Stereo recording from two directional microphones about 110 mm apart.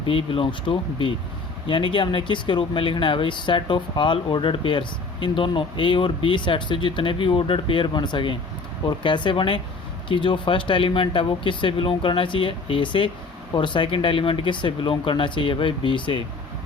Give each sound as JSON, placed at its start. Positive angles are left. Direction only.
{"t": 0.1, "sound": "speech", "side_deg": 55}